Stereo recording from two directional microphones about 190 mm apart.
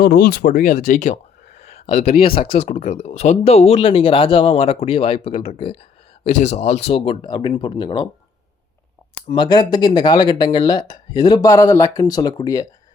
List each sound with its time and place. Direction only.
0.0 s speech: 55° left (ahead or behind); by 2.1 s 35° left (ahead or behind)
2.1 s speech: 50° left (ahead or behind)
2.6 s speech: 40° left (ahead or behind); by 8.0 s 25° left (ahead or behind)
9.3 s speech: 25° left (ahead or behind)